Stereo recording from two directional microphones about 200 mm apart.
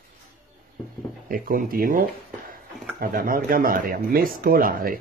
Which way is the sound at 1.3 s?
45° right (ahead or behind).